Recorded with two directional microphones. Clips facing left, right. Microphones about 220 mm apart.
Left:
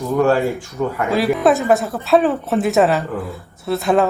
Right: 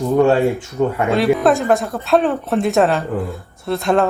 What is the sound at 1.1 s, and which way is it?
Speech, centre (ahead or behind).